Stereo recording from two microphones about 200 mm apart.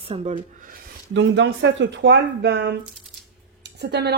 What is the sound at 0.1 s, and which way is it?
Speech, 35° right (ahead or behind).